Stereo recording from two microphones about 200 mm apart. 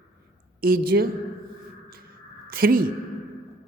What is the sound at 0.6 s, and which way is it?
Speech, 50° right (ahead or behind).